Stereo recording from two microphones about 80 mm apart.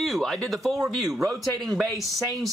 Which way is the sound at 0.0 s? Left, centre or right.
Centre.